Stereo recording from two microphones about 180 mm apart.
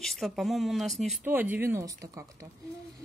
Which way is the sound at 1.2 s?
10° right (ahead or behind).